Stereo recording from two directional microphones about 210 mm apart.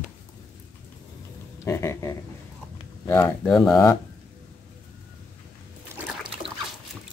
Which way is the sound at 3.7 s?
15° left (ahead or behind).